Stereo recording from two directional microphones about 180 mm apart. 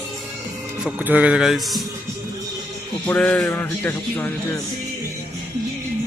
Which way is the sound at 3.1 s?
10° left (ahead or behind).